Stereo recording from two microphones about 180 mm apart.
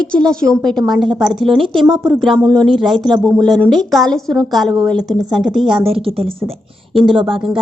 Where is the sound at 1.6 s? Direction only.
25° right (ahead or behind).